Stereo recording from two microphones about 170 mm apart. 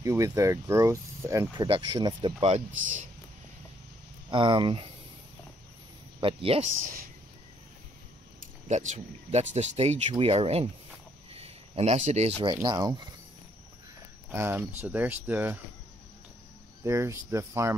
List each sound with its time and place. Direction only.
0.0 s speech: 15° right (ahead or behind)
2.4 s speech: 40° right (ahead or behind)
4.3 s speech: 30° right (ahead or behind)
6.2 s speech: 35° right (ahead or behind)
8.4 s speech: 45° right (ahead or behind)
11.3 s a sound: 35° right (ahead or behind)
12.6 s speech: 25° right (ahead or behind)
14.3 s speech: 15° right (ahead or behind)
16.8 s speech: 15° right (ahead or behind)